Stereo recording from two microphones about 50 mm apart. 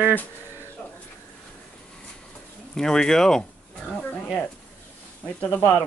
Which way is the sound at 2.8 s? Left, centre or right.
Centre.